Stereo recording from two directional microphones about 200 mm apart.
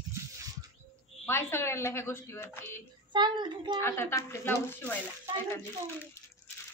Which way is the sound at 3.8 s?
10° left (ahead or behind).